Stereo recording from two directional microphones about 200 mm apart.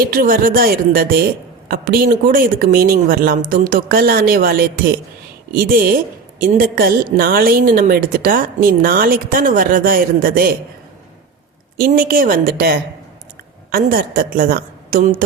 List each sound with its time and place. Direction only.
0.0 s a woman's voice: 45° right (ahead or behind)
11.8 s a woman's voice: 45° right (ahead or behind)